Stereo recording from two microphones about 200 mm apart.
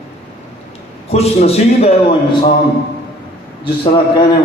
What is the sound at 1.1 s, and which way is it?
A man's voice, 30° left (ahead or behind).